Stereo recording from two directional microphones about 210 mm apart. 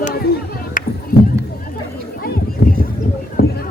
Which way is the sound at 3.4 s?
50° left (ahead or behind).